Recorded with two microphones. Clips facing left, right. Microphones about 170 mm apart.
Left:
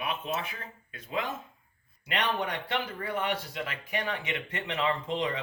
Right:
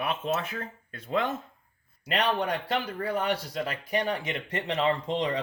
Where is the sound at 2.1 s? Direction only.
35° right (ahead or behind).